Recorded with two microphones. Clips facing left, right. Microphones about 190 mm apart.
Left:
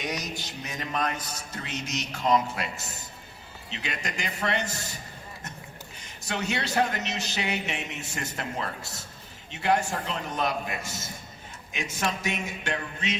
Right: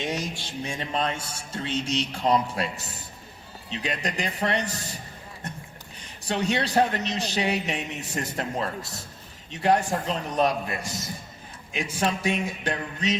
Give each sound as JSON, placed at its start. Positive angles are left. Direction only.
{"t": 0.0, "sound": "mantra", "side_deg": -30}
{"t": 3.7, "sound": "a man's voice", "side_deg": -35}
{"t": 6.1, "sound": "a man's voice", "side_deg": -35}